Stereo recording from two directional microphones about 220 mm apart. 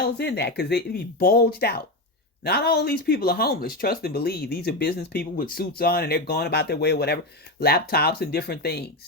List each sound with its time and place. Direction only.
0.0 s speech: 50° left (ahead or behind)